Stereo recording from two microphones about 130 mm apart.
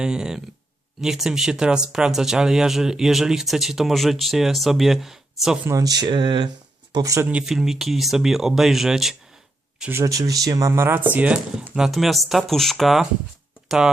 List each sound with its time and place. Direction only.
0.0 s speech: 5° right (ahead or behind)
5.6 s speech: 25° right (ahead or behind)
6.9 s speech: 25° right (ahead or behind)
7.3 s speech: 5° right (ahead or behind)
9.9 s speech: 25° right (ahead or behind); by 13.9 s 5° right (ahead or behind)